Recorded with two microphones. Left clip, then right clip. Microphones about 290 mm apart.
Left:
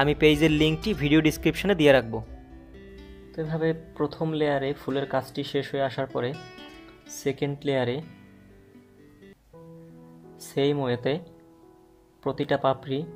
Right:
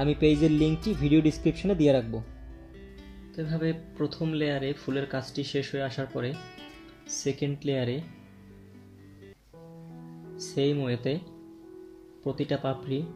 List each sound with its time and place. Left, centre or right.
0.0 s speech: left
3.3 s speech: left
6.3 s music: centre
7.2 s speech: left
10.4 s speech: left
12.4 s speech: left